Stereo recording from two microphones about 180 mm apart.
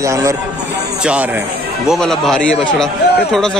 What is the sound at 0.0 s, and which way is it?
Speech, 15° right (ahead or behind).